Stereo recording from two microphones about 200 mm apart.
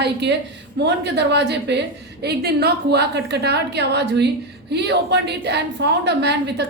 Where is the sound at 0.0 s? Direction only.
60° right (ahead or behind).